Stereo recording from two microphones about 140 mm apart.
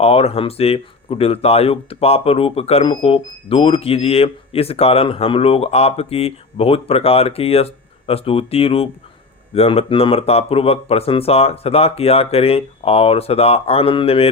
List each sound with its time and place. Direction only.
0.0 s speech: 45° left (ahead or behind)